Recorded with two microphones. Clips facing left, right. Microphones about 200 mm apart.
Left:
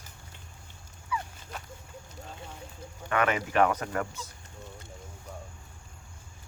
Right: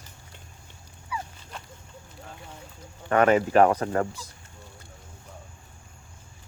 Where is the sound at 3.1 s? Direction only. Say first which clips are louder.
Right 8 dB; 35° right (ahead or behind).